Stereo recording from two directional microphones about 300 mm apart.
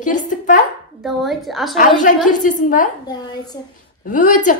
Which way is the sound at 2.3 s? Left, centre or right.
Left.